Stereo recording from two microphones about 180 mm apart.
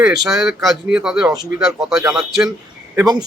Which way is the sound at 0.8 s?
5° right (ahead or behind).